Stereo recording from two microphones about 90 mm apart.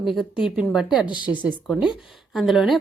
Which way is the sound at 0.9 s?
15° right (ahead or behind).